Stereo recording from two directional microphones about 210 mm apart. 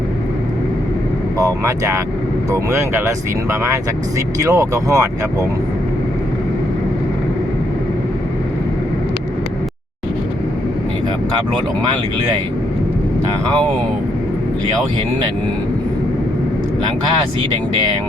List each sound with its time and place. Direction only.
1.4 s speech: 15° right (ahead or behind)